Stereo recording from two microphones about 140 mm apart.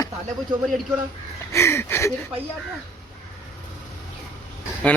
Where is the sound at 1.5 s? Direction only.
20° left (ahead or behind).